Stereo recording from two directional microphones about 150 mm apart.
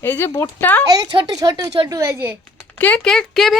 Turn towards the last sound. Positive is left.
turn(degrees=0)  # may be behind; listen again after turning